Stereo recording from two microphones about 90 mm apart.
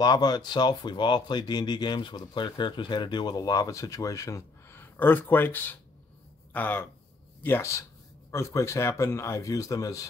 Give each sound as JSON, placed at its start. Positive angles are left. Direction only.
{"t": 0.0, "sound": "speech", "side_deg": 50}
{"t": 4.7, "sound": "speech", "side_deg": 20}